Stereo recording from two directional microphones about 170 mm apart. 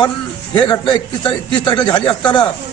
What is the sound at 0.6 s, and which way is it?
A man's voice, 25° left (ahead or behind).